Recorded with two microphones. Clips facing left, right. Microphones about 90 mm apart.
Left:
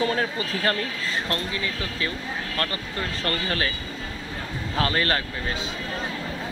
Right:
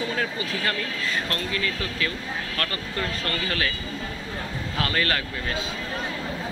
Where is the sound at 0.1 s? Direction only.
35° left (ahead or behind).